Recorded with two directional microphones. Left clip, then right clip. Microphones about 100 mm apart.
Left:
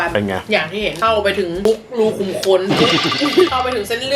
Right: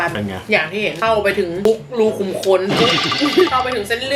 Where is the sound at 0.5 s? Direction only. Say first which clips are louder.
Right 2 dB; centre (ahead or behind).